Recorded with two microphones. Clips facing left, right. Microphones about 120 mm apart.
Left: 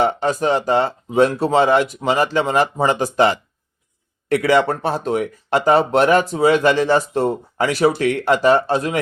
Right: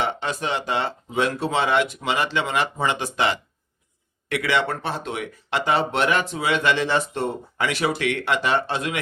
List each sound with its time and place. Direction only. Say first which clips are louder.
0.0 s speech: left 8 dB; 40° left (ahead or behind)